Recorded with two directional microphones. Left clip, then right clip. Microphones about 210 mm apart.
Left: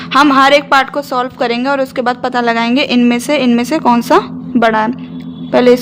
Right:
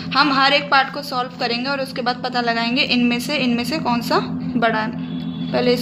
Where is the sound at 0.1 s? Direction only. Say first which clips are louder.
Left 8 dB; 45° left (ahead or behind).